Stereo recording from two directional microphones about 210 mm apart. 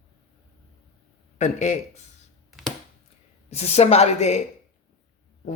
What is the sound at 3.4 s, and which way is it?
Speech, 30° left (ahead or behind).